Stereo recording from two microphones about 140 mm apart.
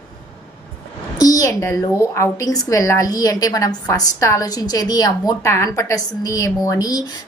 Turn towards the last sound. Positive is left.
turn(degrees=25)  # may be behind; listen again after turning